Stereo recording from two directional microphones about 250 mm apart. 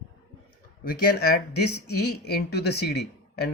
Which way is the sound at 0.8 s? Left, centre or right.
Left.